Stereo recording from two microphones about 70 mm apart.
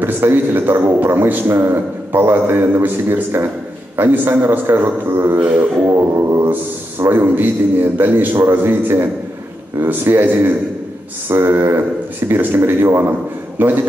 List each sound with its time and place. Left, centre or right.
0.0 s a man's voice: right